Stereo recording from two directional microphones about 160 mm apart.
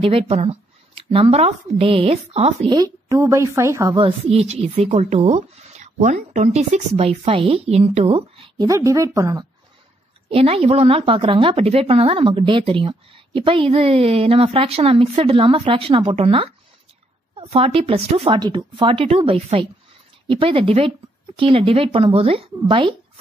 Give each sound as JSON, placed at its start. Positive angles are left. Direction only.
{"t": 0.0, "sound": "a woman's voice", "side_deg": -40}
{"t": 2.7, "sound": "a woman's voice", "side_deg": -25}
{"t": 4.0, "sound": "a woman's voice", "side_deg": -40}
{"t": 8.6, "sound": "a woman's voice", "side_deg": -20}
{"t": 10.3, "sound": "a woman's voice", "side_deg": -40}